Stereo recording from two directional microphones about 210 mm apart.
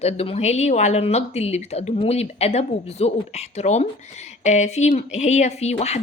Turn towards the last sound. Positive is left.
turn(degrees=30)  # may be behind; listen again after turning